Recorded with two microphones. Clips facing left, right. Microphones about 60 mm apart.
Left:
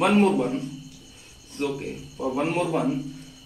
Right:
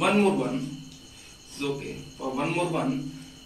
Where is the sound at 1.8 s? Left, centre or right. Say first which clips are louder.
Left 4 dB; left.